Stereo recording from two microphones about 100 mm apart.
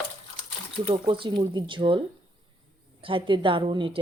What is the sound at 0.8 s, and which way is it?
A woman's voice, 60° right (ahead or behind).